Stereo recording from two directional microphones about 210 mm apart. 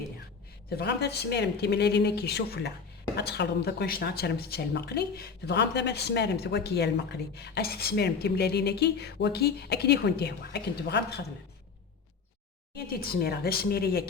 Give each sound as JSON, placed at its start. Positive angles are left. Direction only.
{"t": 0.8, "sound": "speech", "side_deg": 50}
{"t": 12.7, "sound": "speech", "side_deg": 45}